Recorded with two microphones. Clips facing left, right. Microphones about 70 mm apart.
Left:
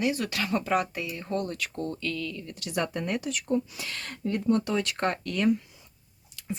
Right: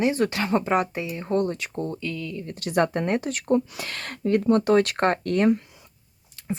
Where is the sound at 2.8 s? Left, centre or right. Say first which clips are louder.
Right 6 dB; right.